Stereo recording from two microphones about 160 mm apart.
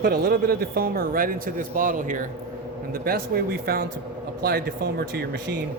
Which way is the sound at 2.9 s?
70° right (ahead or behind).